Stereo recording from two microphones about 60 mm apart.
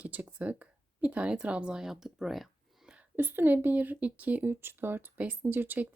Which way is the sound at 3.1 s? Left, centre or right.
Right.